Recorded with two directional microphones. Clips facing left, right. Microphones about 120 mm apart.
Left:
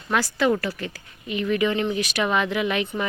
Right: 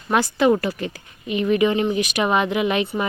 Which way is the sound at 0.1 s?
20° right (ahead or behind).